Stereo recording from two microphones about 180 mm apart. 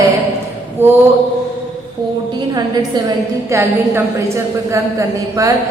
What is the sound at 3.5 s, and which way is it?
A woman's voice, 15° right (ahead or behind).